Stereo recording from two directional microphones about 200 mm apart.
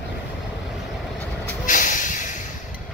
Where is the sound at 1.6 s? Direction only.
40° left (ahead or behind).